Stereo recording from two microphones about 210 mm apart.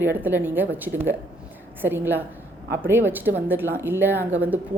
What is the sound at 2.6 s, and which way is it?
Speech, 50° right (ahead or behind).